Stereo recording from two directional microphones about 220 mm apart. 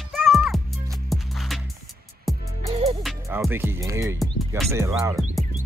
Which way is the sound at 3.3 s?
10° right (ahead or behind).